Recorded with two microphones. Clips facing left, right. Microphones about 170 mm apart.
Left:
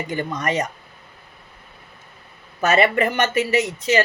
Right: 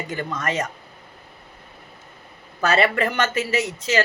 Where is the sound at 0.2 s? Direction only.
20° left (ahead or behind).